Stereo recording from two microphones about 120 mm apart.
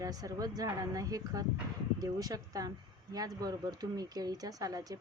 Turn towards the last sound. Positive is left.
turn(degrees=-30)  # may be behind; listen again after turning